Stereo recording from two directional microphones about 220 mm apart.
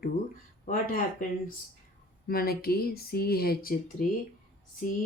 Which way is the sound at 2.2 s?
45° left (ahead or behind).